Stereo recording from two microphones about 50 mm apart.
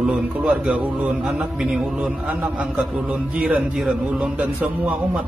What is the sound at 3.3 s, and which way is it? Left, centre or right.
Speech, right.